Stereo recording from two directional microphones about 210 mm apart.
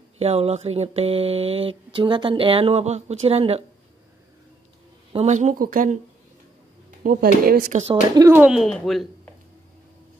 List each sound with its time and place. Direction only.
0.2 s speech: 30° right (ahead or behind)
5.1 s speech: 35° right (ahead or behind)
7.0 s speech: 45° right (ahead or behind)
7.8 s speech: 20° right (ahead or behind)
8.3 s speech: 5° right (ahead or behind)